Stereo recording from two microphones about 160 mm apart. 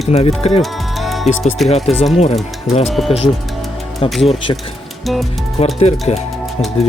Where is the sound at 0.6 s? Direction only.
Centre (ahead or behind).